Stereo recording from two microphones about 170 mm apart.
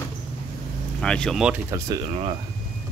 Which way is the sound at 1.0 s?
5° left (ahead or behind).